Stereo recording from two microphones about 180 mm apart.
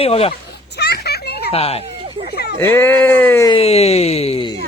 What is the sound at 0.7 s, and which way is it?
Children playing, 65° left (ahead or behind).